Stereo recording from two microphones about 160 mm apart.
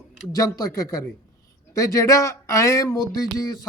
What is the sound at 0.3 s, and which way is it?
Speech, 20° left (ahead or behind).